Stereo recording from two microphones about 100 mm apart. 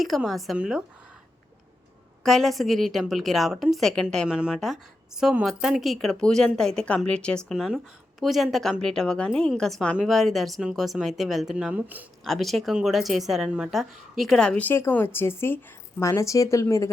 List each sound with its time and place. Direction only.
0.3 s a woman's voice: centre (ahead or behind)
0.5 s speech: 10° right (ahead or behind)
2.2 s a woman's voice: centre (ahead or behind)
4.3 s a woman's voice: 5° right (ahead or behind); by 7.5 s 10° left (ahead or behind)
7.5 s a woman's voice: 5° right (ahead or behind)
11.7 s speech: 15° right (ahead or behind)
12.2 s a woman's voice: centre (ahead or behind); by 16.9 s 30° left (ahead or behind)